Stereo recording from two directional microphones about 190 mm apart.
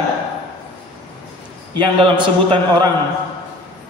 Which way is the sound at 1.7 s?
25° right (ahead or behind).